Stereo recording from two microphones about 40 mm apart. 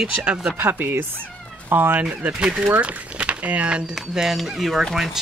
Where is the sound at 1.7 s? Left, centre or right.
Right.